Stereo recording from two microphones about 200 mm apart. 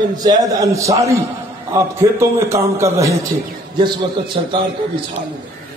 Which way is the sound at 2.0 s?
15° right (ahead or behind).